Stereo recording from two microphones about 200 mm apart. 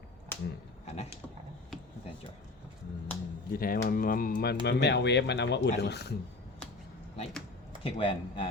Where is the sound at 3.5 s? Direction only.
45° left (ahead or behind).